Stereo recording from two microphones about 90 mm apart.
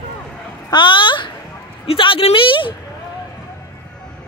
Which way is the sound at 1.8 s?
85° left.